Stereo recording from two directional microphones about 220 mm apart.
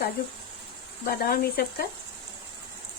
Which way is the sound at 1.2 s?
45° left (ahead or behind).